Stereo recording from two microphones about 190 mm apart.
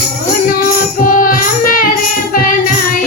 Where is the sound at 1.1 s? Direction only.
45° left (ahead or behind).